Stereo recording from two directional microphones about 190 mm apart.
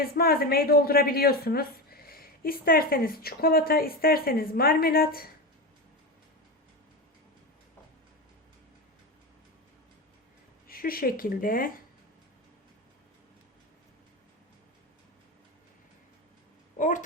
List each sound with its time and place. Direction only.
0.0 s a woman's voice: 50° left (ahead or behind)
10.7 s a woman's voice: 50° left (ahead or behind)
16.7 s a sound: 45° left (ahead or behind)